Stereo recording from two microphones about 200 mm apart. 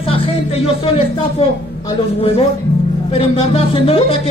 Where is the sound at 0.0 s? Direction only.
30° left (ahead or behind).